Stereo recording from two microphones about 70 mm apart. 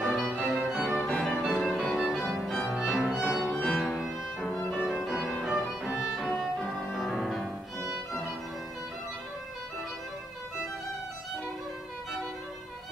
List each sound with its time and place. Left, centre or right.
0.0 s music: centre
0.9 s music: centre
1.2 s music: centre
2.1 s music: centre
3.5 s violin: centre
5.4 s music: centre
6.6 s music: centre
7.9 s violin: centre